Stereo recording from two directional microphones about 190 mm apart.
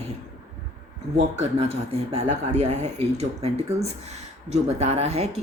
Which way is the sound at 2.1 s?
35° right (ahead or behind).